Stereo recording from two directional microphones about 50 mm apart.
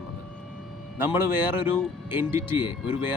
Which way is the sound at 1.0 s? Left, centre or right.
Right.